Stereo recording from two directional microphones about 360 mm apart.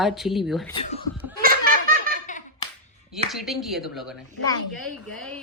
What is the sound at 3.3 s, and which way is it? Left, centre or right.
Speech, centre.